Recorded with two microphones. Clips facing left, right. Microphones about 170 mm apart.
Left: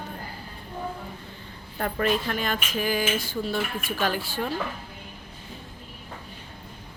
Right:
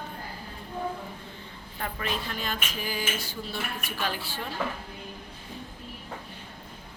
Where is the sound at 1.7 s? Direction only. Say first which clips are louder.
Left 8 dB; 50° left (ahead or behind).